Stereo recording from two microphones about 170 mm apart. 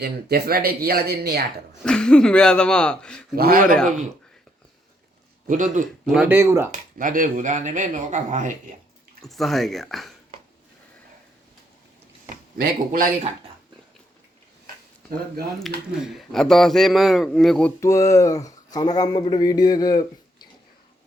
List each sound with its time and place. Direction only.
0.0 s speech: 70° right (ahead or behind)
1.8 s a man's voice: 5° left (ahead or behind)
3.3 s speech: 60° right (ahead or behind)
5.5 s speech: 50° right (ahead or behind)
6.1 s speech: 10° right (ahead or behind)
7.0 s speech: 55° right (ahead or behind)
9.2 s a man's voice: centre (ahead or behind)
12.3 s speech: 55° right (ahead or behind)
15.9 s a man's voice: centre (ahead or behind)
17.7 s a man's voice: 20° left (ahead or behind)